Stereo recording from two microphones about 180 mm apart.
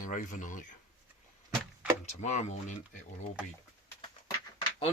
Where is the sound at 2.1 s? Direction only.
40° left (ahead or behind).